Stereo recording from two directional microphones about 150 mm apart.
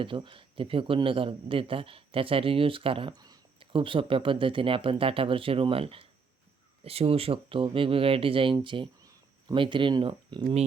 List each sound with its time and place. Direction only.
0.0 s speech: 35° right (ahead or behind)